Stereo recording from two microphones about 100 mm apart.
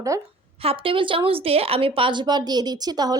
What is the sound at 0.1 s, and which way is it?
Speech, 30° right (ahead or behind).